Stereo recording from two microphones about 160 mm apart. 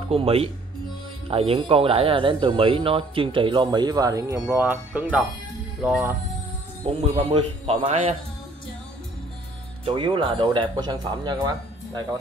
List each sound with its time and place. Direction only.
0.1 s speech: 40° right (ahead or behind); by 4.4 s 20° right (ahead or behind)
4.6 s speech: 10° right (ahead or behind)
6.9 s a man's voice: 40° right (ahead or behind)
9.8 s speech: 30° right (ahead or behind)